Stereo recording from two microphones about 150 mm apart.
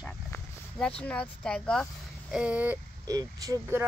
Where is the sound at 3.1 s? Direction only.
25° right (ahead or behind).